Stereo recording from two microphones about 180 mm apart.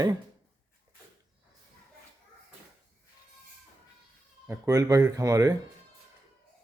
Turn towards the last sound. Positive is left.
turn(degrees=-20)  # may be behind; listen again after turning